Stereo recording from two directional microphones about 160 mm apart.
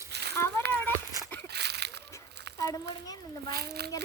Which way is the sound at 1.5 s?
90° right.